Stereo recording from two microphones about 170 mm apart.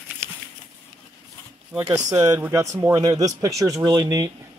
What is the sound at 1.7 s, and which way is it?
Speech, centre (ahead or behind).